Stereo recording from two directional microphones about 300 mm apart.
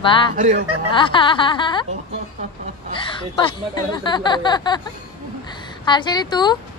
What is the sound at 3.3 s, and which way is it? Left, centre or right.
Speech, centre.